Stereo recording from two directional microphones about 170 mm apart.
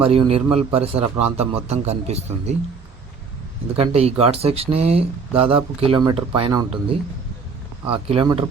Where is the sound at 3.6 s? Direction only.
35° right (ahead or behind).